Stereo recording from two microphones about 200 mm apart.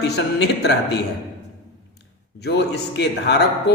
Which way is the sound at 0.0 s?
60° left (ahead or behind).